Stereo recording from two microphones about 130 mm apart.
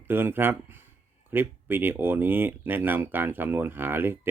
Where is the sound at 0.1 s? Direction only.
15° right (ahead or behind).